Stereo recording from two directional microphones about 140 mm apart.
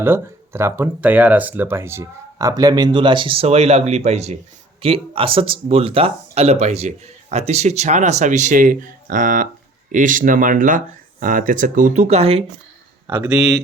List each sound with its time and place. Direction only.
0.0 s speech: 15° right (ahead or behind); by 4.4 s 50° right (ahead or behind)
4.8 s speech: 40° right (ahead or behind); by 12.0 s 70° right (ahead or behind)
12.0 s speech: 45° right (ahead or behind)